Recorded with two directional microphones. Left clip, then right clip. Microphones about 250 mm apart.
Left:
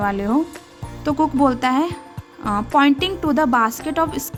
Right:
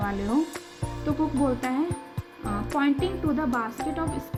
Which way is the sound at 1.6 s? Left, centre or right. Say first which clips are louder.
Left 9 dB; left.